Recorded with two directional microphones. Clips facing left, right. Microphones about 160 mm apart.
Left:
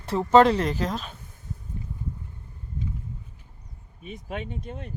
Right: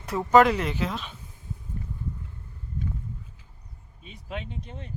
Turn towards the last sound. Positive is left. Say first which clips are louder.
# left 4 dB
turn(degrees=55)  # may be behind; listen again after turning